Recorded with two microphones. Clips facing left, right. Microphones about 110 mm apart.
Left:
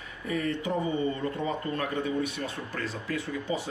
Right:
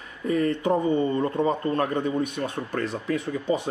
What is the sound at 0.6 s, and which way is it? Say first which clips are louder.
Speech: right 6 dB; 55° right (ahead or behind).